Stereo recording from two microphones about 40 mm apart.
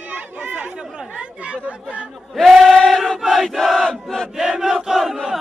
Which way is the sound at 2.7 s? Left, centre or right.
Centre.